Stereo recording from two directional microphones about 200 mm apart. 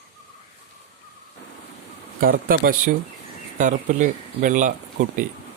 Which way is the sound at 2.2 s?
45° right (ahead or behind).